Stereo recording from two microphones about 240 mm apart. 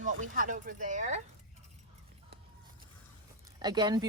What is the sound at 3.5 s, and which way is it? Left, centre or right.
Speech, centre.